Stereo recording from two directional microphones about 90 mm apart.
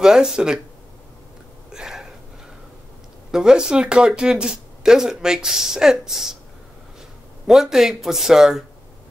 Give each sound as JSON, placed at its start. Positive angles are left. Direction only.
{"t": 0.0, "sound": "speech", "side_deg": -10}
{"t": 1.7, "sound": "a sound", "side_deg": -5}
{"t": 3.3, "sound": "speech", "side_deg": -5}
{"t": 7.4, "sound": "a man's voice", "side_deg": -5}